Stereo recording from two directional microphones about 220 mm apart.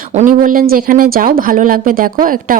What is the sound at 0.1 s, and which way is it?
Speech, 35° right (ahead or behind).